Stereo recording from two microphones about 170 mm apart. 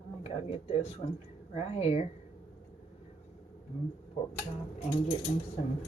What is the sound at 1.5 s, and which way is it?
Speech, 35° left (ahead or behind).